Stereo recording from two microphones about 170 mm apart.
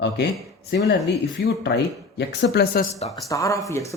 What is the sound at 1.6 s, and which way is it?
Speech, 85° left.